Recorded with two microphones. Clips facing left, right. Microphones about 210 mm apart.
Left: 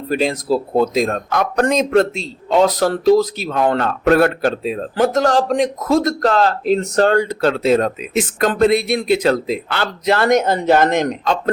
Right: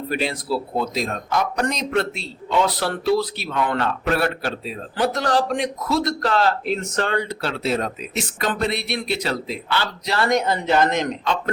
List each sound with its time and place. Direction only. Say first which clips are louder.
0.1 s a man's voice: left 7 dB; 45° left (ahead or behind)
2.5 s a man's voice: left 7 dB; 45° left (ahead or behind)